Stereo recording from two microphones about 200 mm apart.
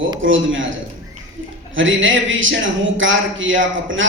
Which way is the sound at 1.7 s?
70° right (ahead or behind).